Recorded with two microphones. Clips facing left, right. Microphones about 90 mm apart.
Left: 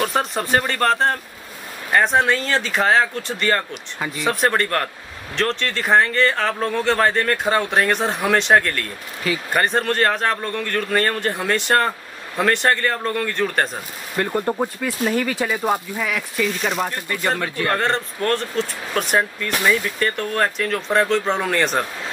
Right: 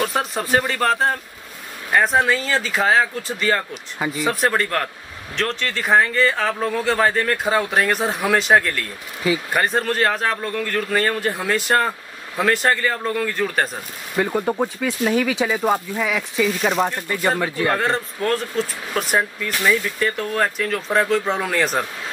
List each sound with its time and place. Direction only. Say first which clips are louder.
0.0 s speech: left 1 dB; centre (ahead or behind)